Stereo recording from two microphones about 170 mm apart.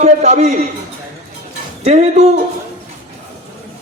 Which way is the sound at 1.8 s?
40° right (ahead or behind).